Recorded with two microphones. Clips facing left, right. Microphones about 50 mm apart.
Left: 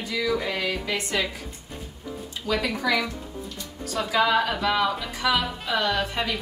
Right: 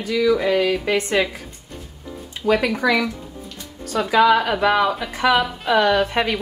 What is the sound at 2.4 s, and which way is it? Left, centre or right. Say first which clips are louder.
Speech: right 8 dB; right.